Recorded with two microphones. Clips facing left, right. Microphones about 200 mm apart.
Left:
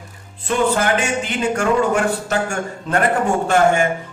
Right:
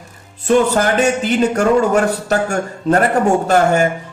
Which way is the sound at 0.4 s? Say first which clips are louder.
Right 5 dB; 40° right (ahead or behind).